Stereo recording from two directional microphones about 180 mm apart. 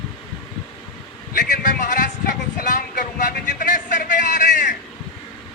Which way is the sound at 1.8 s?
45° left (ahead or behind).